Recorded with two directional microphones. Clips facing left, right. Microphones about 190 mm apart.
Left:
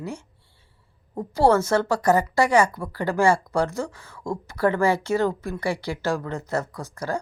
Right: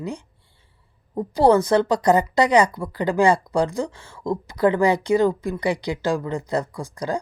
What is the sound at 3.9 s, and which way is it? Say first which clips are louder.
Speech: right 4 dB; 25° right (ahead or behind).